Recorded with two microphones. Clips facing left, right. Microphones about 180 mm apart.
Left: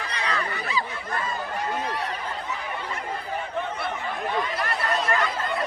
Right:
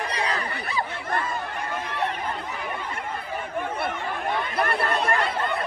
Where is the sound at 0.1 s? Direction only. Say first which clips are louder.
Right 1 dB; 35° right (ahead or behind).